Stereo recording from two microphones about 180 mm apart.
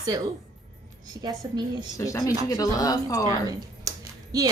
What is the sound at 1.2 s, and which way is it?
Speech, 20° right (ahead or behind).